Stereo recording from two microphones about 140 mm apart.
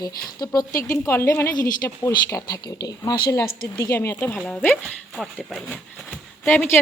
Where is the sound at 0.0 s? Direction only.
25° left (ahead or behind).